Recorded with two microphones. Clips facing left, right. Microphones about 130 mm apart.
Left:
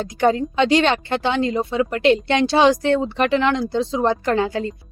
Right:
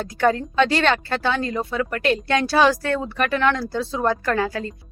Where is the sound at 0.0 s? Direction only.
20° left (ahead or behind).